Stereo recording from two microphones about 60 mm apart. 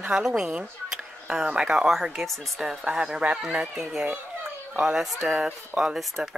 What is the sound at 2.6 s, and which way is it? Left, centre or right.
Speech, centre.